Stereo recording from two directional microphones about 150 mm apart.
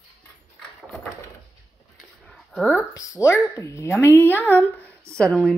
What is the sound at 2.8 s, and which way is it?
A woman's voice, 20° left (ahead or behind).